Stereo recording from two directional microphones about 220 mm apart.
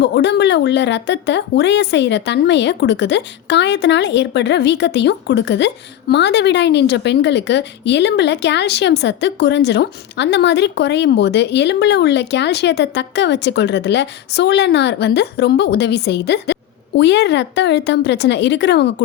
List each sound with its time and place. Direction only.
0.0 s speech: 55° left (ahead or behind)